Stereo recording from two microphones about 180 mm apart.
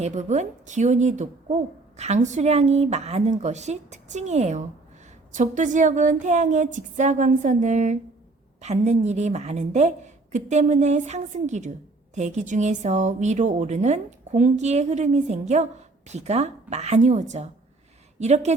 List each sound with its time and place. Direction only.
0.0 s a woman's voice: 40° right (ahead or behind)